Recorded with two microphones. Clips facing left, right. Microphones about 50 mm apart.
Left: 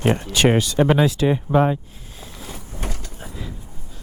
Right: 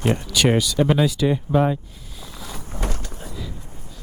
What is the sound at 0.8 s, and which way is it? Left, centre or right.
Speech, centre.